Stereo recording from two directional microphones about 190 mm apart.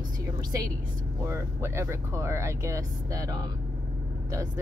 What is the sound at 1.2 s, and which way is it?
Speech, 15° right (ahead or behind).